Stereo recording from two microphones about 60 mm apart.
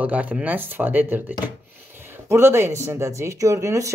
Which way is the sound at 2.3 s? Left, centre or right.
Right.